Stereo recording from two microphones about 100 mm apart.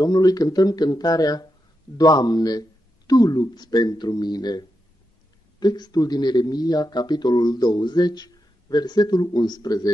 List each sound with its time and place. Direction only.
0.0 s speech: 40° left (ahead or behind)